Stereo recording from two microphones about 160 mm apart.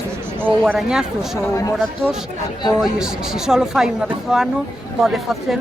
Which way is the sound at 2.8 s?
5° right (ahead or behind).